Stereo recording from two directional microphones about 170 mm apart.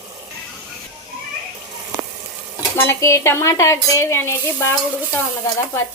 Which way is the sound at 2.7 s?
15° left (ahead or behind).